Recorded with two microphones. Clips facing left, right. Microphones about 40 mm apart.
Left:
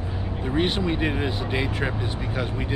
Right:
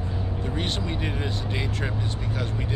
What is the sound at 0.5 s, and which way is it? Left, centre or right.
Speech, centre.